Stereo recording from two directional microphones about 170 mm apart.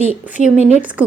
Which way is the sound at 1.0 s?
5° right (ahead or behind).